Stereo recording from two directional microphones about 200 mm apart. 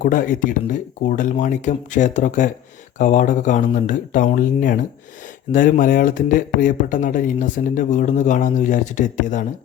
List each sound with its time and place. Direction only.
0.0 s speech: 45° left (ahead or behind)